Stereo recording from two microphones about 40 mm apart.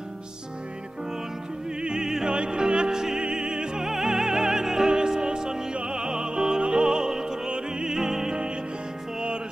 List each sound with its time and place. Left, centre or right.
1.8 s music: centre
3.9 s music: centre